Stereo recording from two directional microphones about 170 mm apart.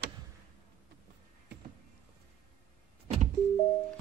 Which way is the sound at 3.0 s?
45° right (ahead or behind).